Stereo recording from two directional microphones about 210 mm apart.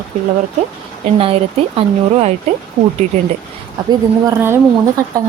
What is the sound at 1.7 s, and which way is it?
Speech, 30° right (ahead or behind).